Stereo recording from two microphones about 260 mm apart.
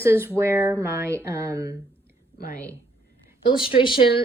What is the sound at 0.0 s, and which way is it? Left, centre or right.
Speech, centre.